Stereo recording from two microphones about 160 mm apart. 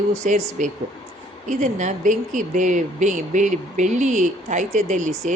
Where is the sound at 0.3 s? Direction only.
50° right (ahead or behind).